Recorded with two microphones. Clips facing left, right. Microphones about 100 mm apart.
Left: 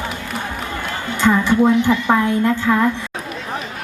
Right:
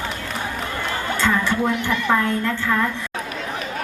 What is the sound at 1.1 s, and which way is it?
A woman's voice, 15° left (ahead or behind).